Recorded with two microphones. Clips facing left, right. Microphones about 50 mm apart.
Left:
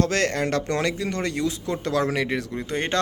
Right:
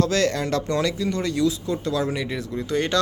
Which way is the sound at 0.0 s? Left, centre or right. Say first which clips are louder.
Right 1 dB; left.